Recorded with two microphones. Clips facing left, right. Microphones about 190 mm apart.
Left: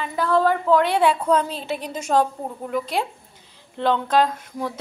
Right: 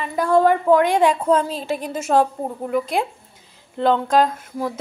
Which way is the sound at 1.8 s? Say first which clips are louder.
Right 2 dB; 5° right (ahead or behind).